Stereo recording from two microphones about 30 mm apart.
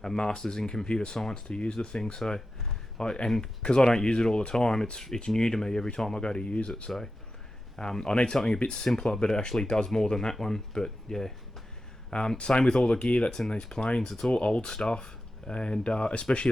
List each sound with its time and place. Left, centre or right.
0.0 s speech: centre
6.2 s speech: left
7.8 s speech: left
12.1 s speech: left